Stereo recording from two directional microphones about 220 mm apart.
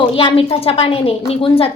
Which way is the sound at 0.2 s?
25° left (ahead or behind).